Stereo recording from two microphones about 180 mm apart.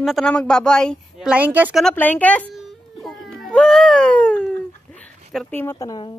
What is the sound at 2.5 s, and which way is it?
Cat, centre (ahead or behind).